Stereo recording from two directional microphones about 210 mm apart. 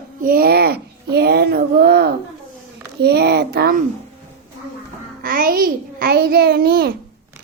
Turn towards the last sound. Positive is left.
turn(degrees=-45)  # may be behind; listen again after turning